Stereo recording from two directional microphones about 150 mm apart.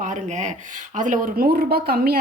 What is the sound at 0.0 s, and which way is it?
A woman's voice, 55° right (ahead or behind).